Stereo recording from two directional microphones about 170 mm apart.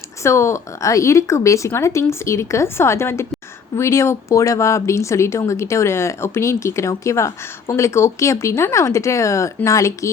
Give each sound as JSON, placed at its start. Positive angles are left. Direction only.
{"t": 0.2, "sound": "speech", "side_deg": 15}